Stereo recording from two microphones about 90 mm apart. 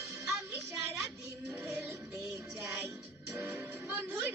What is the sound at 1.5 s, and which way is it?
Music, 20° right (ahead or behind).